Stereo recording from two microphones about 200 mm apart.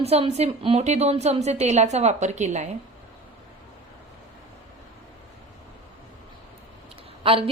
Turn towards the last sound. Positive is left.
turn(degrees=-25)  # may be behind; listen again after turning